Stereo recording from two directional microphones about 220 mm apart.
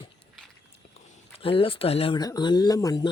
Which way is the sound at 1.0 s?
25° left (ahead or behind).